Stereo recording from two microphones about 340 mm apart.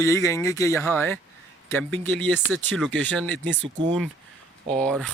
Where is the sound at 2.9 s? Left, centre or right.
Right.